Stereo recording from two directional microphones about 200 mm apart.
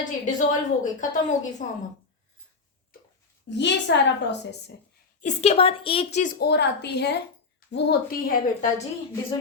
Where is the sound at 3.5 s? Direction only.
60° left (ahead or behind).